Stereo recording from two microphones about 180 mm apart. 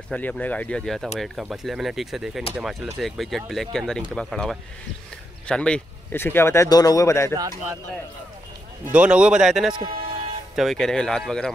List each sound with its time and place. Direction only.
0.1 s speech: 10° left (ahead or behind)
8.8 s speech: 5° right (ahead or behind)
9.8 s speech: 30° right (ahead or behind)
10.5 s speech: centre (ahead or behind)